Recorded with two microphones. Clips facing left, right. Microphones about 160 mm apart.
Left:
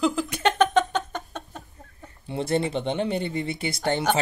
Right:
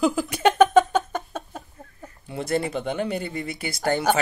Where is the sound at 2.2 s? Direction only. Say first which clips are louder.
Left 1 dB; 25° left (ahead or behind).